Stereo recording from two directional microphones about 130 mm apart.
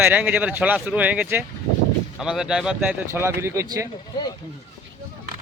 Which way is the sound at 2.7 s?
15° right (ahead or behind).